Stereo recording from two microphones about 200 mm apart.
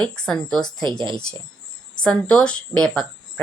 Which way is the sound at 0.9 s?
25° right (ahead or behind).